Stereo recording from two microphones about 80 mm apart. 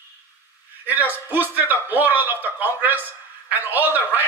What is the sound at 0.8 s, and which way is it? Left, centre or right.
A man's voice, right.